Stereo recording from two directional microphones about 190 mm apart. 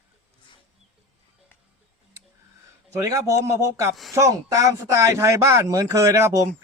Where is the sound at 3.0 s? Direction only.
15° right (ahead or behind).